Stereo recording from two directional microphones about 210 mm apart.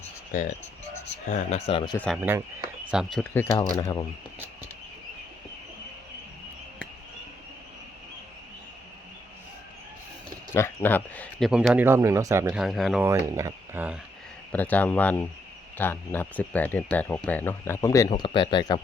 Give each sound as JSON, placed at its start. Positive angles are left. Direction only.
{"t": 0.3, "sound": "speech", "side_deg": 35}
{"t": 2.3, "sound": "speech", "side_deg": -10}
{"t": 10.5, "sound": "speech", "side_deg": 10}
{"t": 13.1, "sound": "speech", "side_deg": -15}
{"t": 14.5, "sound": "speech", "side_deg": 10}